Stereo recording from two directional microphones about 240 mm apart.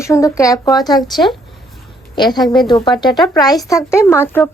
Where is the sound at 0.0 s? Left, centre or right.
Centre.